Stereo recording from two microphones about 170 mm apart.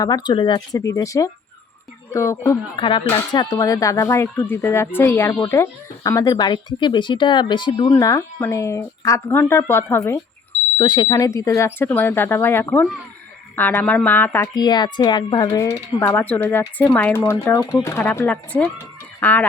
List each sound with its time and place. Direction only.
0.0 s speech: 25° left (ahead or behind)
2.7 s speech: 30° left (ahead or behind); by 10.2 s 15° left (ahead or behind)
10.8 s speech: 25° left (ahead or behind); by 14.5 s 10° left (ahead or behind)
14.5 s speech: 25° left (ahead or behind)